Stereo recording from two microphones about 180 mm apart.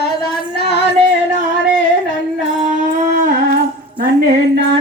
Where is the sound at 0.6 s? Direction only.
65° left (ahead or behind).